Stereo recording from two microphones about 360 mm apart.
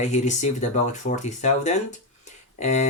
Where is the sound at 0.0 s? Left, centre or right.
Centre.